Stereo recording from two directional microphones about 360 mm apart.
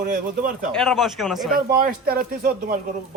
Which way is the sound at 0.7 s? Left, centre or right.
Centre.